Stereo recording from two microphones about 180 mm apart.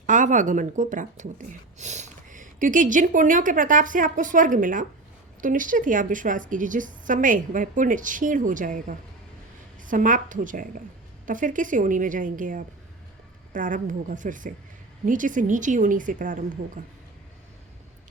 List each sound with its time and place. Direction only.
0.0 s a woman's voice: 45° right (ahead or behind)